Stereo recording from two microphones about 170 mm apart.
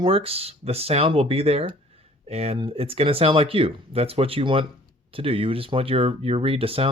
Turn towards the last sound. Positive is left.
turn(degrees=-35)  # may be behind; listen again after turning